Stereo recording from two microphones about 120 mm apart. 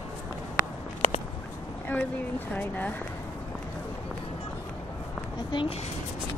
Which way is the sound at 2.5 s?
15° left (ahead or behind).